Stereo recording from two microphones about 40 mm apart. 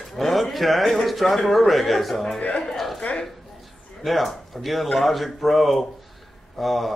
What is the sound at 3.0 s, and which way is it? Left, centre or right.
Speech, left.